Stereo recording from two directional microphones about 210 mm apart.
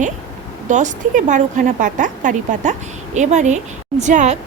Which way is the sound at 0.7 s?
35° right (ahead or behind).